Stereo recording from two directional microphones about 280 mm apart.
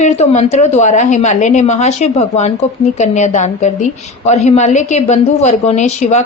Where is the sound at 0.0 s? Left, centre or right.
Left.